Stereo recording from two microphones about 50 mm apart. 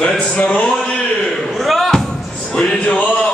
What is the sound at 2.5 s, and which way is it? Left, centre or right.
Speech, centre.